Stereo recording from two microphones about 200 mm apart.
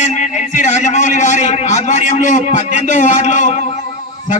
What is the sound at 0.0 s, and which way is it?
A man's voice, 35° left (ahead or behind).